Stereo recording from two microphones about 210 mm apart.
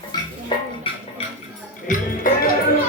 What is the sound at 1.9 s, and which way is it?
Music, 40° left (ahead or behind).